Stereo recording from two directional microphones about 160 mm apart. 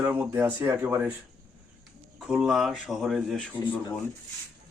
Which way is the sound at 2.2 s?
5° right (ahead or behind).